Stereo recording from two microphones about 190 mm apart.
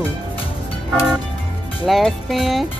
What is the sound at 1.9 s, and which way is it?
Speech, centre (ahead or behind).